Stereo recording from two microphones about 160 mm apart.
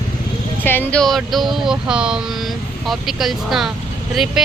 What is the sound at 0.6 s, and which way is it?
Speech, 15° left (ahead or behind).